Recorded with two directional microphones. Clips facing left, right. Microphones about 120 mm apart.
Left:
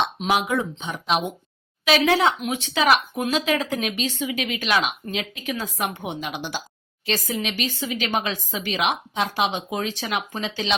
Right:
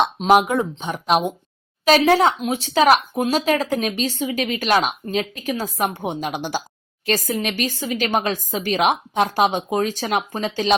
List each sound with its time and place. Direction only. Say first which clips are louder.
0.2 s speech: right 9 dB; 40° right (ahead or behind)